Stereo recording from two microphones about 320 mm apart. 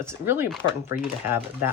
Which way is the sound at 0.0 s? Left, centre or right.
Centre.